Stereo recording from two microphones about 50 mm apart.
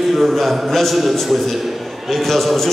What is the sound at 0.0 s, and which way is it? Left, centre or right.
A man's voice, centre.